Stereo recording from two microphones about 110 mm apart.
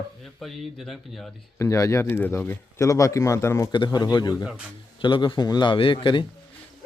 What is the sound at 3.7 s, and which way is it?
A man's voice, 40° left (ahead or behind).